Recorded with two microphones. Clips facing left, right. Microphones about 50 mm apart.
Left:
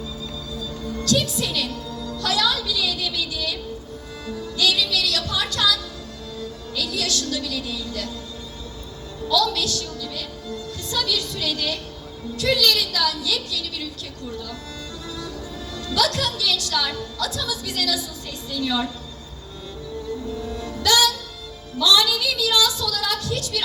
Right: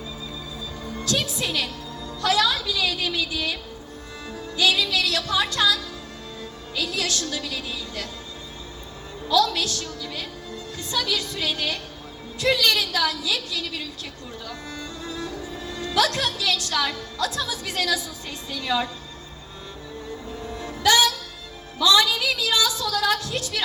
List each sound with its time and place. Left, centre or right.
0.9 s a woman's voice: right
4.5 s music: right
7.3 s a woman's voice: right
9.3 s a woman's voice: right
20.6 s music: right